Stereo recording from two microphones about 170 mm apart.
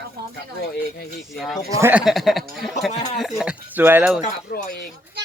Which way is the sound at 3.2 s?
Centre (ahead or behind).